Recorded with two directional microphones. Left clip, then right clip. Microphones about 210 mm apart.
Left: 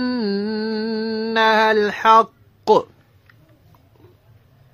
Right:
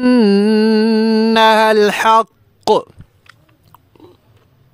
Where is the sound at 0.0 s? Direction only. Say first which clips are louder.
Right 11 dB; 40° right (ahead or behind).